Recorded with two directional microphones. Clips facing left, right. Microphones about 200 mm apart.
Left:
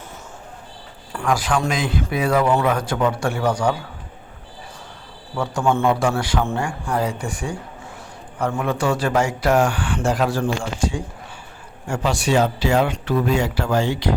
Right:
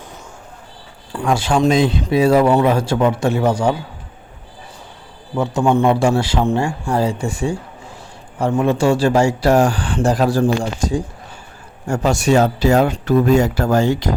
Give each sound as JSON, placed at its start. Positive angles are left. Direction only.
{"t": 1.1, "sound": "a man's voice", "side_deg": -25}
{"t": 5.4, "sound": "a man's voice", "side_deg": -20}